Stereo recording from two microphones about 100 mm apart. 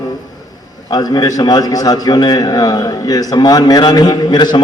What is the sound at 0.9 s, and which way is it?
A man's voice, 40° left (ahead or behind).